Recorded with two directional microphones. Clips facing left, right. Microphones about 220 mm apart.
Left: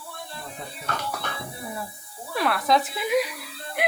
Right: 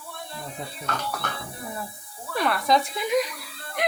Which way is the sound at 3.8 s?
10° left (ahead or behind).